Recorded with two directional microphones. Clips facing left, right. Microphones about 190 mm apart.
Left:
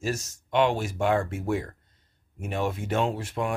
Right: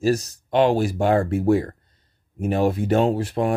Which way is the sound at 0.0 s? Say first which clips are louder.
Right 10 dB; 35° right (ahead or behind).